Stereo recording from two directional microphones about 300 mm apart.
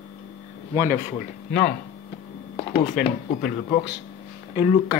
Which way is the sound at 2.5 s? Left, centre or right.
Left.